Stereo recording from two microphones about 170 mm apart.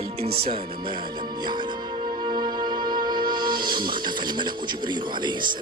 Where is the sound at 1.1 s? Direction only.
25° right (ahead or behind).